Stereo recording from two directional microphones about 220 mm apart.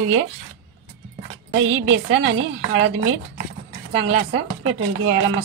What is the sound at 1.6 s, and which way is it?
A woman's voice, 55° right (ahead or behind).